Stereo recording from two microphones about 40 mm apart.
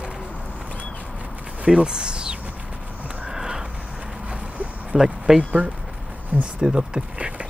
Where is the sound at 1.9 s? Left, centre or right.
Right.